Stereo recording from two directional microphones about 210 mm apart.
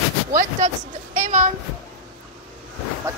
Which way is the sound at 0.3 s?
40° right (ahead or behind).